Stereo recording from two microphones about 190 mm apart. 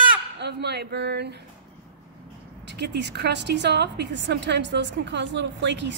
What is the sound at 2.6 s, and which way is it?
A woman's voice, 60° right (ahead or behind).